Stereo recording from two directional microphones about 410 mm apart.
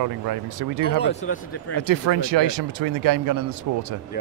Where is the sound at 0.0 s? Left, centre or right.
Right.